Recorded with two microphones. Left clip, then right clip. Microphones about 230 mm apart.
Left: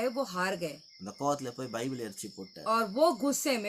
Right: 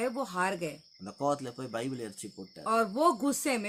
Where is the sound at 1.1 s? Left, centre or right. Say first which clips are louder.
Right 1 dB; centre.